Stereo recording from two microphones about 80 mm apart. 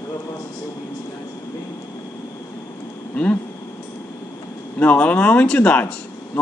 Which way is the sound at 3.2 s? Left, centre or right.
Centre.